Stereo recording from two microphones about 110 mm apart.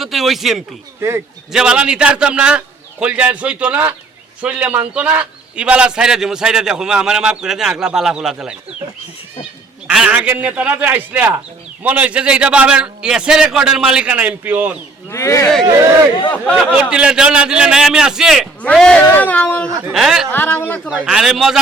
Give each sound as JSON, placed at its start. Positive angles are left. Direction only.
{"t": 0.0, "sound": "a man's voice", "side_deg": 0}
{"t": 9.8, "sound": "a man's voice", "side_deg": -10}
{"t": 15.1, "sound": "speech", "side_deg": 25}
{"t": 16.3, "sound": "speech", "side_deg": 15}
{"t": 16.7, "sound": "a man's voice", "side_deg": -10}
{"t": 18.6, "sound": "speech", "side_deg": 5}
{"t": 19.9, "sound": "speech", "side_deg": -5}
{"t": 20.3, "sound": "speech", "side_deg": 20}
{"t": 20.9, "sound": "speech", "side_deg": -10}